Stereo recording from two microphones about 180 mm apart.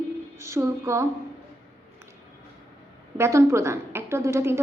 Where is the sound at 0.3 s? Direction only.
15° right (ahead or behind).